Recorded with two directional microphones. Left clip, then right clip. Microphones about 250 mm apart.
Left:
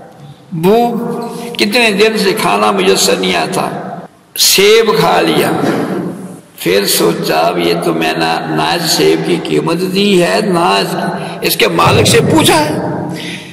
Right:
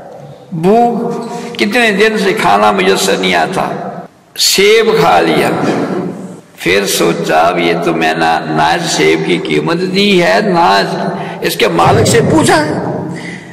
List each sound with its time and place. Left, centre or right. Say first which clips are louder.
0.6 s a man's voice: right 1 dB; left
6.6 s a man's voice: even; left